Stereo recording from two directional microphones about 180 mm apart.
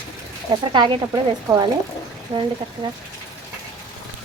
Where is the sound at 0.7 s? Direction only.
25° right (ahead or behind).